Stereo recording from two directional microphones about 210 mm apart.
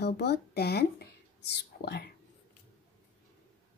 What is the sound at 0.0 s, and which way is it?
Speech, 50° left (ahead or behind).